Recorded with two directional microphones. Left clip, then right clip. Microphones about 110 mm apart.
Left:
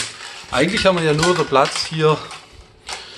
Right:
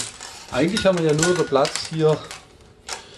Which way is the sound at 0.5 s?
10° right (ahead or behind).